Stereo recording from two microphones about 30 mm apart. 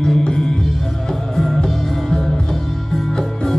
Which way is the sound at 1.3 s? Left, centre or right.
Centre.